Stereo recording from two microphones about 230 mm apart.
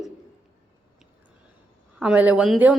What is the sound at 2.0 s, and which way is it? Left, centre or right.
Speech, centre.